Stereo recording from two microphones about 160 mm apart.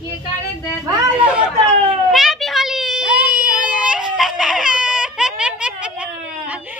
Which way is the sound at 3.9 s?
Centre (ahead or behind).